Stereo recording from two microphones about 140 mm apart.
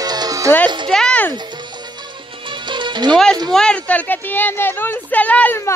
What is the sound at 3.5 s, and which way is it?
Speech, 5° left (ahead or behind).